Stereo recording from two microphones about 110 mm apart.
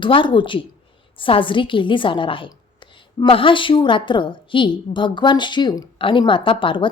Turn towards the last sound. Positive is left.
turn(degrees=50)  # may be behind; listen again after turning